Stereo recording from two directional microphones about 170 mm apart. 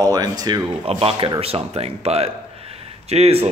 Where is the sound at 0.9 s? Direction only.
35° right (ahead or behind).